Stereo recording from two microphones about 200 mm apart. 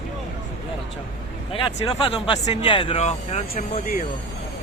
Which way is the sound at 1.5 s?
25° left (ahead or behind).